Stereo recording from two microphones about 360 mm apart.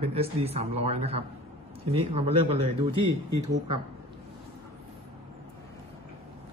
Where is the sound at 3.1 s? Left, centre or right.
Right.